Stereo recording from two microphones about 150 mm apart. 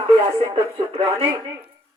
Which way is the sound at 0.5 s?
35° right (ahead or behind).